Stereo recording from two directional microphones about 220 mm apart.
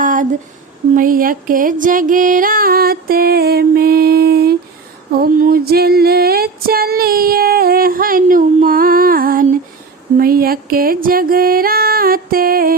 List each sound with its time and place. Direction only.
0.0 s a sound: 35° right (ahead or behind)
0.9 s music: 40° right (ahead or behind)
5.1 s female singing: 45° right (ahead or behind)
10.2 s music: 40° right (ahead or behind)